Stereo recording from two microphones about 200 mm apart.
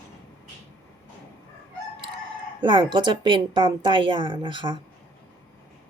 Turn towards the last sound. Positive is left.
turn(degrees=-25)  # may be behind; listen again after turning